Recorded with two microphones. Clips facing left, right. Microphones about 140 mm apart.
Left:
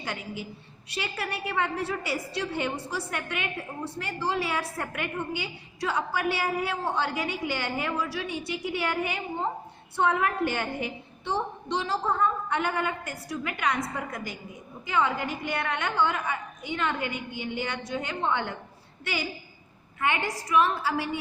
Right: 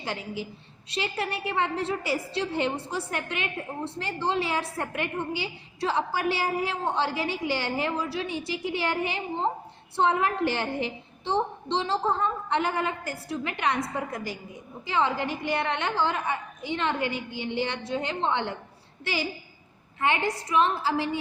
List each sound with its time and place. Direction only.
0.0 s a woman's voice: 30° right (ahead or behind)